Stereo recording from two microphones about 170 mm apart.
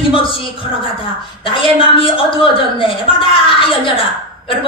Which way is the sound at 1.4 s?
30° left (ahead or behind).